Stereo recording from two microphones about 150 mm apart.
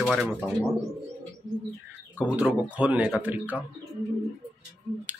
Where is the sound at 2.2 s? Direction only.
10° right (ahead or behind).